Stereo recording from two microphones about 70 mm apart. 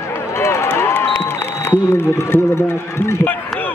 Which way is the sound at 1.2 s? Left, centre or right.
Left.